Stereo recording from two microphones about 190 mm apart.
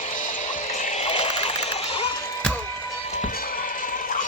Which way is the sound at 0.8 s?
30° left (ahead or behind).